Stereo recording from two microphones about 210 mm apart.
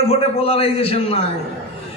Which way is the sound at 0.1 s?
25° left (ahead or behind).